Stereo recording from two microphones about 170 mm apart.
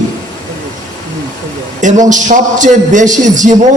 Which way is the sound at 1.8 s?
45° right (ahead or behind).